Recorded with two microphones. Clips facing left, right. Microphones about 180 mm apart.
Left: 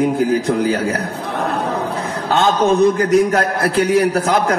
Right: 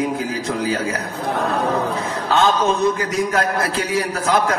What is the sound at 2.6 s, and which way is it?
Speech, 60° left (ahead or behind).